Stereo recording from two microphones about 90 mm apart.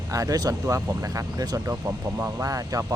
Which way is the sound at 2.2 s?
25° right (ahead or behind).